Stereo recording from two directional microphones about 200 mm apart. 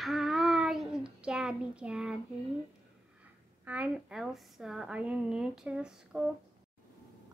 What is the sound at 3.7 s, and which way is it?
A woman's voice, 5° right (ahead or behind).